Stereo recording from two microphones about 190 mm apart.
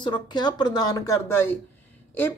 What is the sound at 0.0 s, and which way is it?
A woman's voice, 25° left (ahead or behind).